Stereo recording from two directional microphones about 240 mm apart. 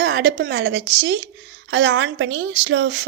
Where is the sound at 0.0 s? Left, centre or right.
Right.